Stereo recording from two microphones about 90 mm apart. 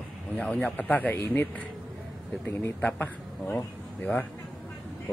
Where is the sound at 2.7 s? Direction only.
15° left (ahead or behind).